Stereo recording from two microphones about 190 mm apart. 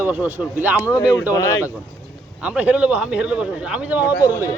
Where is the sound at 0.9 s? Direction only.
15° left (ahead or behind).